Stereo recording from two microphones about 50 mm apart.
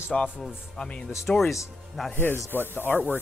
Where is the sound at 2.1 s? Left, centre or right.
Left.